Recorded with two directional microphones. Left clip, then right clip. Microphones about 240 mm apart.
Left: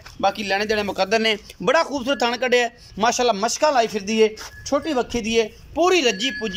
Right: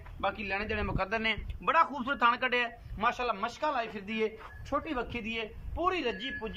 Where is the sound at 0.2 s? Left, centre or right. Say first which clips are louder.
Left 12 dB; left.